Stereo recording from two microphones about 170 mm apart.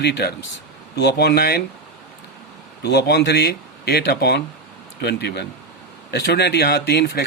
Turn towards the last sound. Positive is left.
turn(degrees=75)  # may be behind; listen again after turning